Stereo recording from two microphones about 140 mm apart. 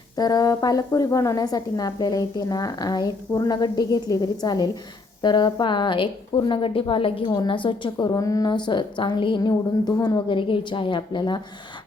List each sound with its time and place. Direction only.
0.2 s a woman's voice: 25° left (ahead or behind)